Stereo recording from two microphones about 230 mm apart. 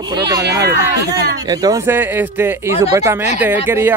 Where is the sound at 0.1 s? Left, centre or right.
Centre.